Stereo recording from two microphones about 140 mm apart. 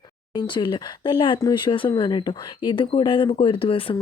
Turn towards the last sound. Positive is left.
turn(degrees=40)  # may be behind; listen again after turning